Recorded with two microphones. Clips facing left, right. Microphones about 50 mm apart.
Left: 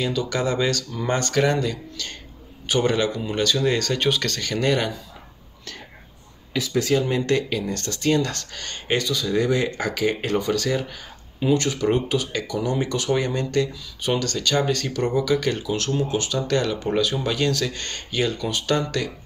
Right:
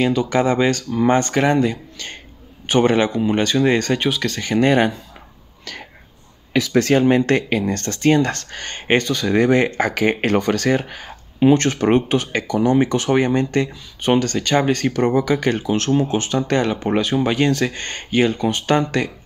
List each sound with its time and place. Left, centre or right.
0.0 s speech: right
4.0 s speech: centre
4.4 s speech: right
5.7 s speech: right
6.5 s speech: right
6.9 s speech: right